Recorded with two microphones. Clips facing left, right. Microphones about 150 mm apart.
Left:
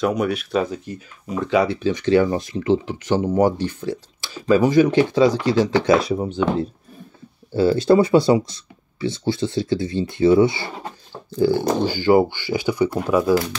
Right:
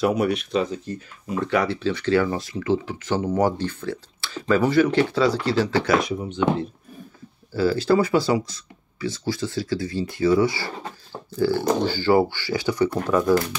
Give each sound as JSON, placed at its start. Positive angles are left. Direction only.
{"t": 0.0, "sound": "speech", "side_deg": -5}
{"t": 0.7, "sound": "speech", "side_deg": 10}
{"t": 6.1, "sound": "speech", "side_deg": 40}
{"t": 7.5, "sound": "speech", "side_deg": 25}